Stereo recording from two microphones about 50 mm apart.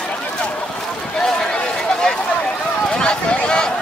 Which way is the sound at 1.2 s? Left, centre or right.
Centre.